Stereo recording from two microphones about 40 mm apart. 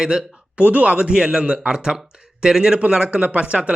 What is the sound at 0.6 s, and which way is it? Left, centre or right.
Speech, right.